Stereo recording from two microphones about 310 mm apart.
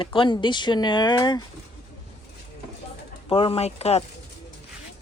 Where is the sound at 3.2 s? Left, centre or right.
Centre.